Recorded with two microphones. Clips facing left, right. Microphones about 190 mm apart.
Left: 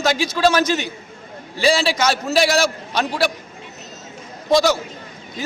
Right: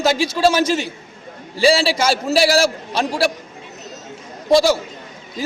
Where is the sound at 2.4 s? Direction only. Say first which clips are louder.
Right 2 dB; 5° right (ahead or behind).